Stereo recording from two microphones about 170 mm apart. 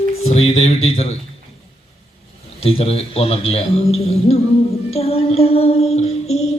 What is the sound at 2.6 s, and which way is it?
A man's voice, 35° left (ahead or behind).